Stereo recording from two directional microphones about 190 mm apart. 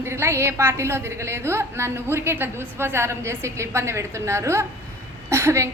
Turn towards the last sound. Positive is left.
turn(degrees=-15)  # may be behind; listen again after turning